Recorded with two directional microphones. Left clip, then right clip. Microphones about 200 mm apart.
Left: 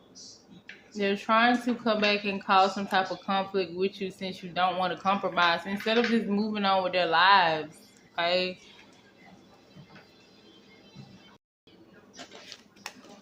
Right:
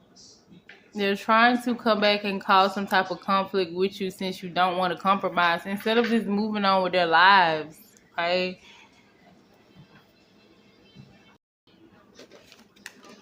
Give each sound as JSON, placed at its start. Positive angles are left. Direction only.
{"t": 0.9, "sound": "a woman's voice", "side_deg": -30}